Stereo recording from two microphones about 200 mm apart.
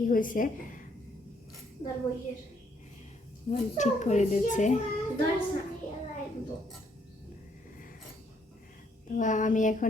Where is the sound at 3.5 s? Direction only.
35° left (ahead or behind).